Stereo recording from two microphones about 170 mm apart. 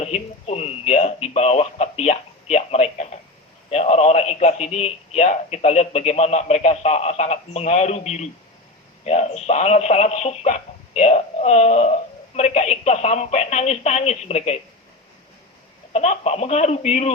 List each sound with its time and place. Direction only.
0.0 s a man's voice: 40° left (ahead or behind)
15.9 s speech: 40° left (ahead or behind)